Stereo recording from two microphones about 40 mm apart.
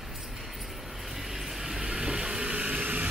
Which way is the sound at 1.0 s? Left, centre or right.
Centre.